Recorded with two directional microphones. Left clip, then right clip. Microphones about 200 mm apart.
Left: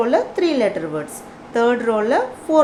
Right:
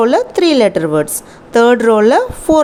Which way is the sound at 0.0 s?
50° right (ahead or behind).